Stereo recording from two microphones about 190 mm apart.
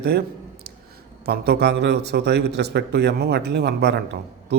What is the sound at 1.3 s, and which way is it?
A man's voice, 60° right (ahead or behind).